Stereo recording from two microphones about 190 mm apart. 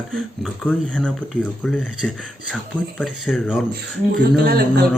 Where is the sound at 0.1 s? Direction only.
5° left (ahead or behind).